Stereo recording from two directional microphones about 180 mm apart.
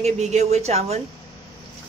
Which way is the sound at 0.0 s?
40° right (ahead or behind).